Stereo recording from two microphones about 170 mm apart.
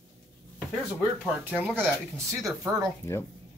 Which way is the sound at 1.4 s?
10° right (ahead or behind).